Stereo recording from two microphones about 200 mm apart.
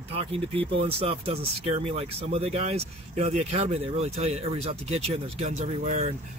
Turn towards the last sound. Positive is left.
turn(degrees=-35)  # may be behind; listen again after turning